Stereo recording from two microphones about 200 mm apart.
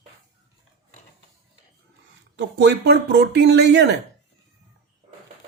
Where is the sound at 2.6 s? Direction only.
60° right (ahead or behind).